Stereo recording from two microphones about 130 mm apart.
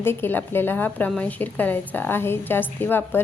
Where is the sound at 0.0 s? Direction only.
15° left (ahead or behind).